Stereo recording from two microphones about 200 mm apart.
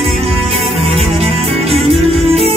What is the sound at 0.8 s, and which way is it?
Music, 30° right (ahead or behind).